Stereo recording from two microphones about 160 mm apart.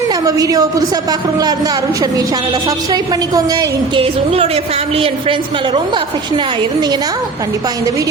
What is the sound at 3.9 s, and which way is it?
A woman's voice, 35° right (ahead or behind).